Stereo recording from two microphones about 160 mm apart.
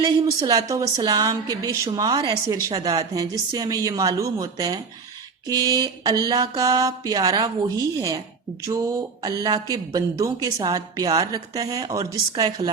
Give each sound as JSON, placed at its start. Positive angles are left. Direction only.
{"t": 0.0, "sound": "speech", "side_deg": -25}